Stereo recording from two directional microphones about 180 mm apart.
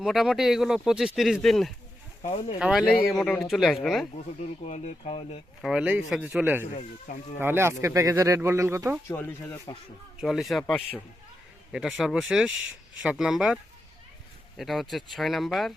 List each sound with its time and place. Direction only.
0.0 s speech: centre (ahead or behind)
2.2 s speech: 30° left (ahead or behind)
2.6 s speech: 5° right (ahead or behind)
4.6 s speech: 40° left (ahead or behind)
5.6 s speech: 5° right (ahead or behind)
6.7 s speech: 45° left (ahead or behind)
7.3 s speech: 10° right (ahead or behind)
9.0 s speech: 10° left (ahead or behind)
10.2 s speech: centre (ahead or behind)